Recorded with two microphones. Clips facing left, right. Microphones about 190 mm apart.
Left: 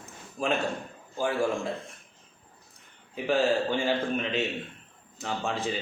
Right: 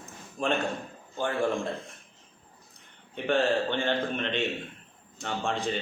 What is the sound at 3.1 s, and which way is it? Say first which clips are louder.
Speech: left 1 dB; 5° left (ahead or behind).